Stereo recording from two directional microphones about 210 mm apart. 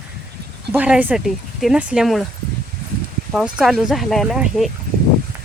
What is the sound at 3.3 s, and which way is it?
Speech, 5° right (ahead or behind).